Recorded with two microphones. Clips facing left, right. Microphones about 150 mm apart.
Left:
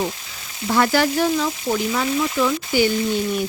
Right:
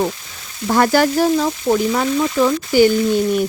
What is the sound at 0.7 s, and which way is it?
Speech, 45° right (ahead or behind).